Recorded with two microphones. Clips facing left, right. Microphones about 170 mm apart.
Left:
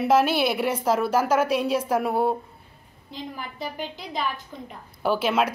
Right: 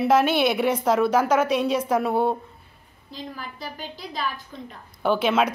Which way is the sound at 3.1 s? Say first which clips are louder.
Left 1 dB; 20° left (ahead or behind).